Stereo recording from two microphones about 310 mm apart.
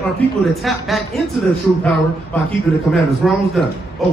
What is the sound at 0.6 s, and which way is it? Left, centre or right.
Speech, centre.